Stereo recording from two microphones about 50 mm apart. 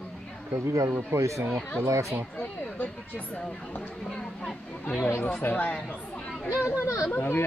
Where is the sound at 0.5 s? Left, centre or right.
Right.